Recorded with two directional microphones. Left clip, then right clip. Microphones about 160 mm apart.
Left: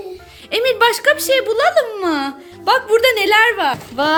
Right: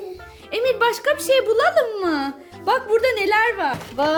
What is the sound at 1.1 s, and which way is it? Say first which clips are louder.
Speech: left 2 dB; 10° right (ahead or behind).